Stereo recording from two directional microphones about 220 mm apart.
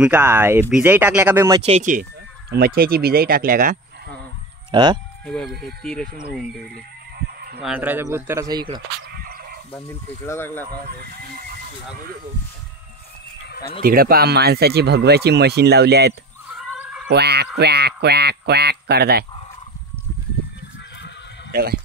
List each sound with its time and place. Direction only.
0.0 s speech: 10° right (ahead or behind)
1.7 s speech: 35° right (ahead or behind)
4.6 s speech: 20° right (ahead or behind)
5.2 s speech: centre (ahead or behind)
7.2 s fowl: 45° right (ahead or behind)
7.6 s speech: 5° right (ahead or behind)
9.1 s frog: 45° right (ahead or behind)
9.8 s speech: 10° left (ahead or behind)
13.8 s speech: 45° right (ahead or behind)
16.5 s cat: 5° right (ahead or behind)
17.1 s speech: 50° right (ahead or behind)
21.5 s speech: 45° right (ahead or behind)